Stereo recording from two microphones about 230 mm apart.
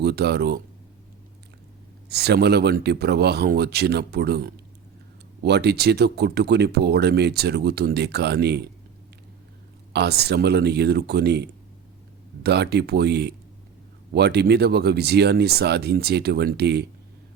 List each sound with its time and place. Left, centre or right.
0.0 s speech: right
2.0 s speech: right
9.9 s speech: right